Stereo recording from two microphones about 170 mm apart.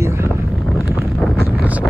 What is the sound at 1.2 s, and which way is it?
Wind noise, 5° left (ahead or behind).